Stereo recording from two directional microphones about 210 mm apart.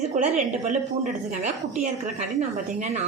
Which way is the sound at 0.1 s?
35° right (ahead or behind).